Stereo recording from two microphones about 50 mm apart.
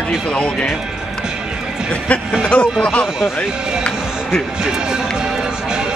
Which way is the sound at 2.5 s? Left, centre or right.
Left.